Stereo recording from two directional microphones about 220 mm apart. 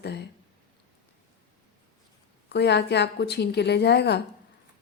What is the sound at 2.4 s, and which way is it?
A woman's voice, 50° left (ahead or behind).